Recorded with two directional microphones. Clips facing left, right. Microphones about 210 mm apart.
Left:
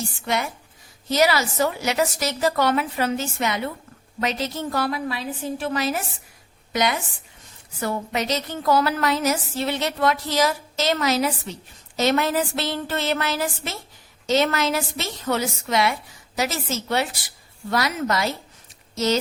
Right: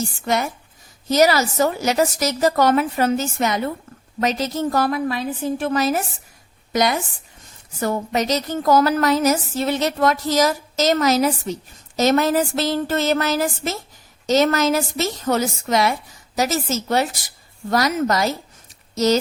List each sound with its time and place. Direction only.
0.3 s a woman's voice: 45° right (ahead or behind)